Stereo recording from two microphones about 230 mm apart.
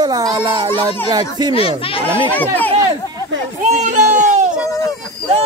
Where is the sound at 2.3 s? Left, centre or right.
Centre.